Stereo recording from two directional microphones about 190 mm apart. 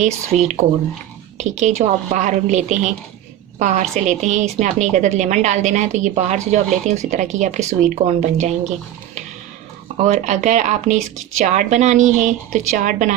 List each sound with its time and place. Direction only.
0.0 s a woman's voice: 40° right (ahead or behind)
10.0 s a woman's voice: 40° right (ahead or behind)